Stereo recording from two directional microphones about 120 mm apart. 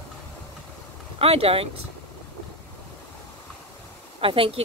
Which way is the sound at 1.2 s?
55° right (ahead or behind).